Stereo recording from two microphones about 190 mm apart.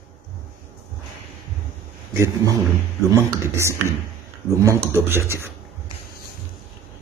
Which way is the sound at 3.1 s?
15° right (ahead or behind).